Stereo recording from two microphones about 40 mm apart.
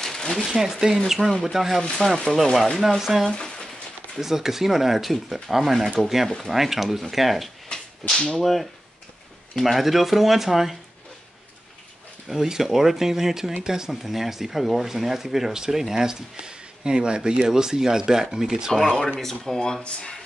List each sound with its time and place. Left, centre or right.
0.0 s a sound: centre
0.5 s speech: centre
2.0 s speech: centre
3.0 s speech: centre
3.3 s a sound: centre
4.2 s speech: centre
6.2 s speech: centre
6.5 s speech: centre
12.3 s speech: centre
18.7 s speech: centre; by 20.2 s left